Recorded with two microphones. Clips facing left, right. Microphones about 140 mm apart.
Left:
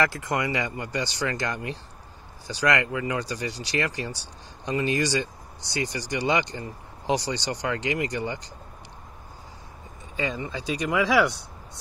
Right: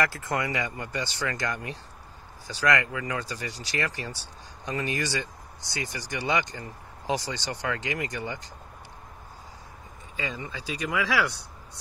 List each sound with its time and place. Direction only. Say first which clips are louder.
0.1 s speech: left 2 dB; 20° left (ahead or behind)
10.3 s speech: left 5 dB; 20° left (ahead or behind)